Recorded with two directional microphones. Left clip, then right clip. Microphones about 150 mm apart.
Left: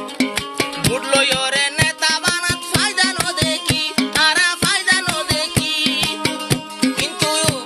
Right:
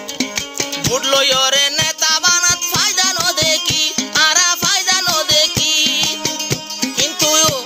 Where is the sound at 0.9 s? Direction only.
45° right (ahead or behind).